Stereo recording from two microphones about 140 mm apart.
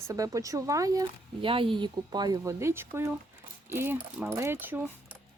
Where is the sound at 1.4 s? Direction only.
40° right (ahead or behind); by 4.8 s 15° right (ahead or behind).